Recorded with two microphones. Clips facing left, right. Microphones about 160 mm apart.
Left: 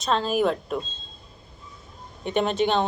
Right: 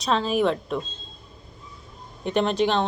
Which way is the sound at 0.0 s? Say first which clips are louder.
Right 1 dB; centre (ahead or behind).